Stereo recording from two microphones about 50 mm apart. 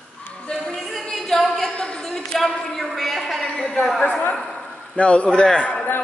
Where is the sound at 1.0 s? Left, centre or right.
Centre.